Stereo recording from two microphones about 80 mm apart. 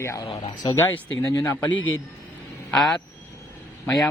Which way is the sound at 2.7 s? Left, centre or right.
Centre.